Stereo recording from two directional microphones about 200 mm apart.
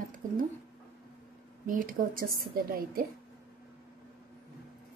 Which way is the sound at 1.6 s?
45° right (ahead or behind).